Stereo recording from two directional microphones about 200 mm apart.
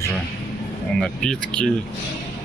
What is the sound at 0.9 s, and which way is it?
Speech, 5° left (ahead or behind).